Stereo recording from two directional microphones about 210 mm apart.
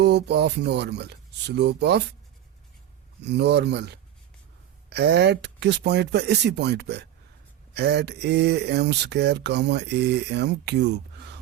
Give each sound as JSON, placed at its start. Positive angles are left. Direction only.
{"t": 0.0, "sound": "speech", "side_deg": -50}
{"t": 3.2, "sound": "speech", "side_deg": -55}